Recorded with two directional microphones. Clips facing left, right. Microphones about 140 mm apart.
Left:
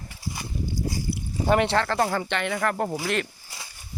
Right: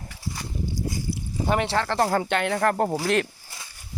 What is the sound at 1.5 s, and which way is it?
Speech, 5° right (ahead or behind).